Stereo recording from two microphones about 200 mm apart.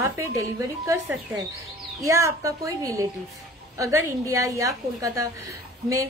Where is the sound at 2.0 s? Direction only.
15° right (ahead or behind).